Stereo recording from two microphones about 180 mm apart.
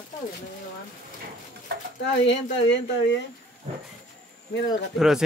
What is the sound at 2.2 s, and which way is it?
Speech, 80° left.